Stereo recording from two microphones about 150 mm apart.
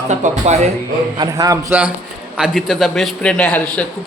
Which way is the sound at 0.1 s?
50° right (ahead or behind).